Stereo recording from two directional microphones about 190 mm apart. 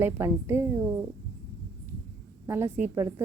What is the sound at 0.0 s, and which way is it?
Speech, 15° right (ahead or behind).